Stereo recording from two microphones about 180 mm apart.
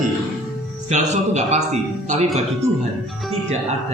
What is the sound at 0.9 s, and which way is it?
Speech, 40° right (ahead or behind).